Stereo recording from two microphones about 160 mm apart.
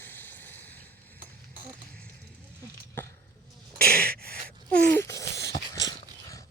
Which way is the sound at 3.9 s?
70° right (ahead or behind).